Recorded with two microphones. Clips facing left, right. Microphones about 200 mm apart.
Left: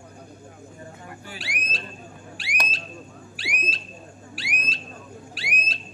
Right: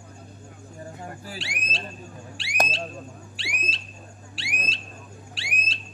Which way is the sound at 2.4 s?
25° right (ahead or behind).